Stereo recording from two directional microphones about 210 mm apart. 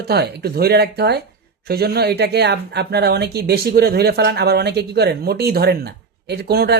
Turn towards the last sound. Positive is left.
turn(degrees=-50)  # may be behind; listen again after turning